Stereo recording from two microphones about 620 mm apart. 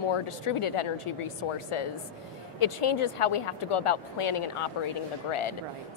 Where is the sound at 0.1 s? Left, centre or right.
Left.